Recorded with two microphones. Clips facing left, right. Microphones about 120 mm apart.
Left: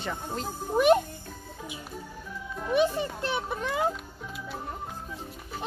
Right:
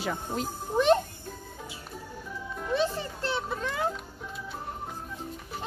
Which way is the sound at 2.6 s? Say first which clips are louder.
Left 4 dB; 15° left (ahead or behind).